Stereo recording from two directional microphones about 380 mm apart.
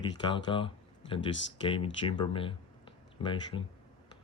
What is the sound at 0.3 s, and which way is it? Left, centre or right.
Speech, centre.